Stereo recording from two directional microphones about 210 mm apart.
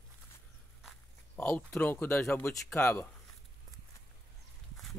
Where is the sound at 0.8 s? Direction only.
10° left (ahead or behind).